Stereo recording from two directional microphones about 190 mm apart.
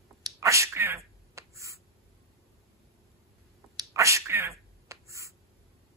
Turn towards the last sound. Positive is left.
turn(degrees=-15)  # may be behind; listen again after turning